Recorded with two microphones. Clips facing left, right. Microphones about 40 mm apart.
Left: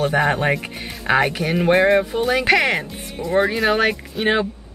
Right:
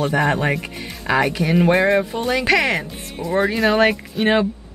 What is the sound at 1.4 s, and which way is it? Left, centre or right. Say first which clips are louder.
Speech: even; centre.